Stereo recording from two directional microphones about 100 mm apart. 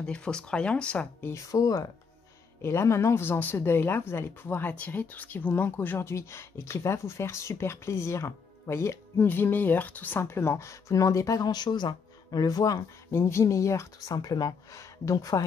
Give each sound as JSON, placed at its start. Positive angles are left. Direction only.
{"t": 0.0, "sound": "speech", "side_deg": 10}
{"t": 1.2, "sound": "speech", "side_deg": 30}
{"t": 13.1, "sound": "speech", "side_deg": 25}